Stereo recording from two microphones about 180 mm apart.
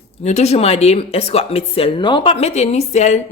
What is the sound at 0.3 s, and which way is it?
Speech, 40° left (ahead or behind).